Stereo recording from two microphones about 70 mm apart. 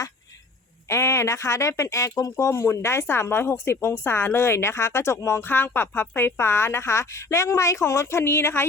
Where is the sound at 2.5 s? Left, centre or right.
Left.